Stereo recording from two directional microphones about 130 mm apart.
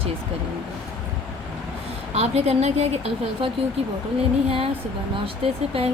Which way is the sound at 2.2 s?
50° right (ahead or behind).